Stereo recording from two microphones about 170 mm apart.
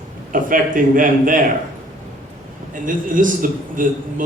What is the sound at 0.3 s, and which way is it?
A man's voice, 55° right (ahead or behind).